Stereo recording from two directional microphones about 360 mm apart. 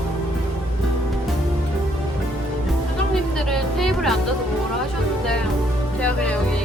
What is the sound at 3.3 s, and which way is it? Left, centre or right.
Music, centre.